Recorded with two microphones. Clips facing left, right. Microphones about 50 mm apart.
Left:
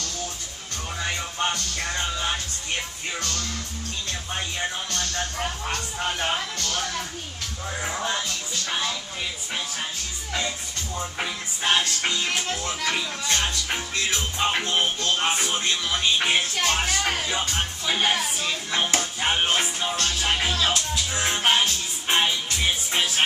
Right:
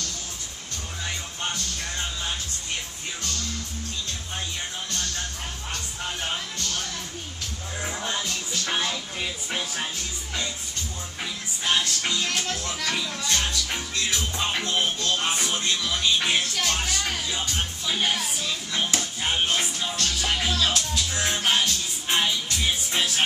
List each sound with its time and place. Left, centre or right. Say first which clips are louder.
5.4 s speech: left 6 dB; left
7.8 s speech: left 3 dB; left
8.6 s music: right 1 dB; centre
11.0 s music: left 7 dB; left
11.7 s speech: left 1 dB; left
12.3 s speech: left 2 dB; centre
21.1 s music: left 3 dB; left